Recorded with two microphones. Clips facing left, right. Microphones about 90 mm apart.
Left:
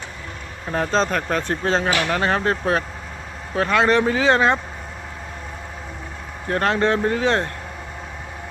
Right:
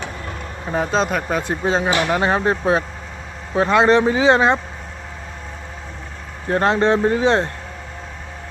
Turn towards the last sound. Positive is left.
turn(degrees=-20)  # may be behind; listen again after turning